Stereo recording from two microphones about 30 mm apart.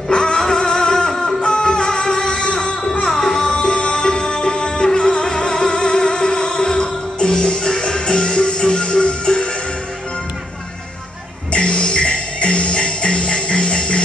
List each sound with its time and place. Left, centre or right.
0.1 s music: left
3.5 s music: left
11.5 s music: left